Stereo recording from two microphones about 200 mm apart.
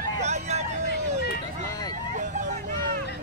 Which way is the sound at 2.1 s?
40° right (ahead or behind).